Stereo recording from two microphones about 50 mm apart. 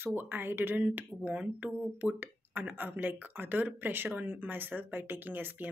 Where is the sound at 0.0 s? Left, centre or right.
Right.